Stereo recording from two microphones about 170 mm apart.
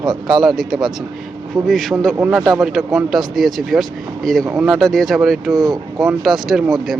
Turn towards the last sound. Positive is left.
turn(degrees=0)  # may be behind; listen again after turning